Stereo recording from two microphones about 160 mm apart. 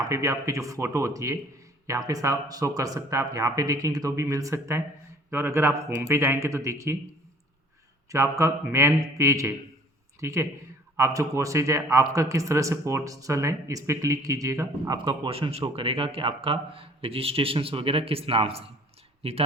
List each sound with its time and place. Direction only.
0.0 s speech: 20° right (ahead or behind)
8.1 s speech: 20° right (ahead or behind)
14.9 s speech: 30° right (ahead or behind)